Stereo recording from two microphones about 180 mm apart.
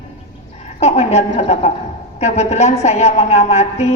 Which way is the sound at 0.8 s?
40° left (ahead or behind).